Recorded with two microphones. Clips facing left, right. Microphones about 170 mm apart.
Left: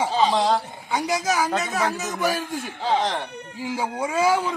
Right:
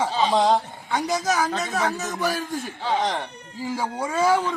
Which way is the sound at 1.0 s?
5° left (ahead or behind).